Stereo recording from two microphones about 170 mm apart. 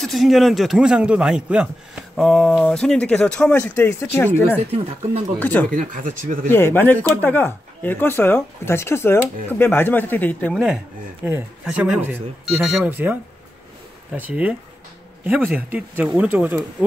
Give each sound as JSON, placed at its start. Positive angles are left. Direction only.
{"t": 0.0, "sound": "a man's voice", "side_deg": 0}
{"t": 4.6, "sound": "speech", "side_deg": -35}
{"t": 5.4, "sound": "speech", "side_deg": 10}
{"t": 5.7, "sound": "speech", "side_deg": -50}
{"t": 6.5, "sound": "speech", "side_deg": 10}
{"t": 10.5, "sound": "a man's voice", "side_deg": -5}
{"t": 11.2, "sound": "a man's voice", "side_deg": -15}